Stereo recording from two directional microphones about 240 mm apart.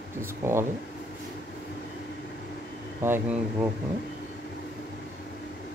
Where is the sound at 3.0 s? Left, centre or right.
Centre.